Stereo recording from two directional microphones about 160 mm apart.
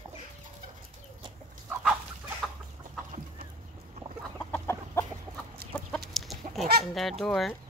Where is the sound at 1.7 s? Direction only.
5° right (ahead or behind).